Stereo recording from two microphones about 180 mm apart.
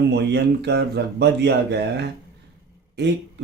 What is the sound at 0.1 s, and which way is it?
Speech, 70° right (ahead or behind).